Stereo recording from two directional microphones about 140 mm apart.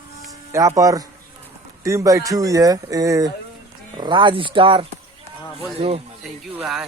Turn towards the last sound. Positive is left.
turn(degrees=-5)  # may be behind; listen again after turning